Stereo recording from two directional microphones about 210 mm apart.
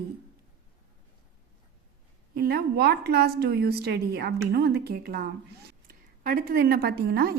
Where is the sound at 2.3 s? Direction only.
50° right (ahead or behind).